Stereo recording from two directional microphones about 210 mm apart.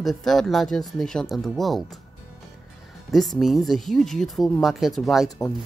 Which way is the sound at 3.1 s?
Centre (ahead or behind).